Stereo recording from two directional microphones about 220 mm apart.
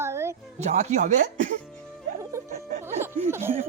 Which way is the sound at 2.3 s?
15° right (ahead or behind).